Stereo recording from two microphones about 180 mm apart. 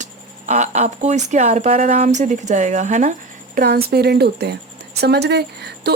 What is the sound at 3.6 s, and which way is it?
Speech, 60° right (ahead or behind).